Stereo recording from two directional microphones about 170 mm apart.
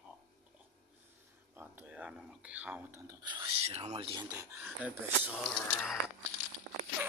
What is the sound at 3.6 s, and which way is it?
Speech, 40° right (ahead or behind).